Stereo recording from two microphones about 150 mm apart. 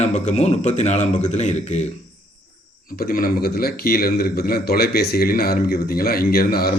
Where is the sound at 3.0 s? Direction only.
80° left.